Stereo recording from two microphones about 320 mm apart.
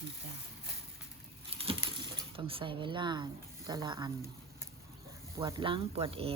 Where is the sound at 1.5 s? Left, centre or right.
Centre.